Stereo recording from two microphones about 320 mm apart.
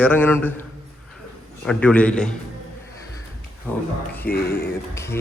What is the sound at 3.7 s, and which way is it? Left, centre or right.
Speech, centre.